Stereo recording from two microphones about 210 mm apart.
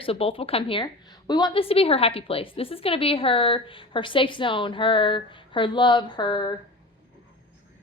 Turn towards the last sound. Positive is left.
turn(degrees=20)  # may be behind; listen again after turning